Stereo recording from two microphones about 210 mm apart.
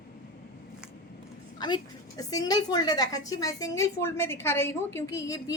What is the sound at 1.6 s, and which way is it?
A woman's voice, 20° left (ahead or behind).